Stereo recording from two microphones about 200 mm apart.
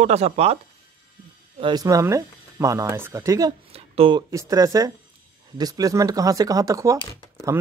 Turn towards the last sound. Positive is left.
turn(degrees=15)  # may be behind; listen again after turning